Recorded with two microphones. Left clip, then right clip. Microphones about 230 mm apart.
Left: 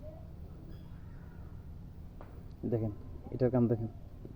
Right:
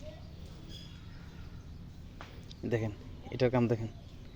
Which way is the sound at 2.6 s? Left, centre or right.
Right.